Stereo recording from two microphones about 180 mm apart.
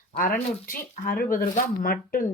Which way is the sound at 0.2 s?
50° left (ahead or behind).